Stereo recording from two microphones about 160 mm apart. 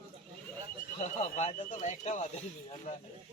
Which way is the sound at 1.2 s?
45° left (ahead or behind).